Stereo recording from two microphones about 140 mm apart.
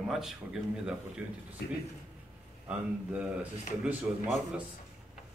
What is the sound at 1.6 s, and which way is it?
Speech, 90° left.